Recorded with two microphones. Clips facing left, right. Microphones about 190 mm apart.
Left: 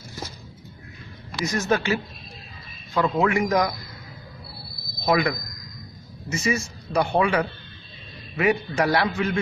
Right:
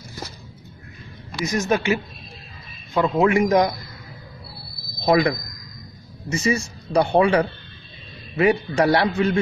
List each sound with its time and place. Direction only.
1.4 s a man's voice: 20° right (ahead or behind)
5.0 s speech: 30° right (ahead or behind)
6.3 s speech: 30° right (ahead or behind)